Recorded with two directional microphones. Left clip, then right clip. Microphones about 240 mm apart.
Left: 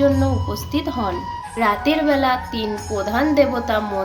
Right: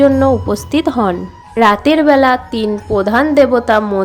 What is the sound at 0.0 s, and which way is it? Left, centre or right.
A woman's voice, right.